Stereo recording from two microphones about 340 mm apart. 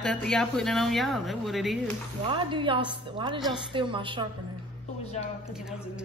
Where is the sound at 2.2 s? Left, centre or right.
Centre.